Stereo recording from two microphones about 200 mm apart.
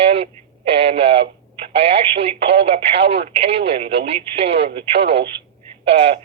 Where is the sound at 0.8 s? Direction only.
30° right (ahead or behind).